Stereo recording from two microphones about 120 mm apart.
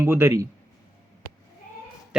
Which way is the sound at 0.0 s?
20° right (ahead or behind).